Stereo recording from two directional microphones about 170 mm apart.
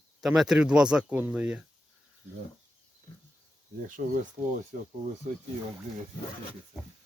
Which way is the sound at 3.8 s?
55° right (ahead or behind).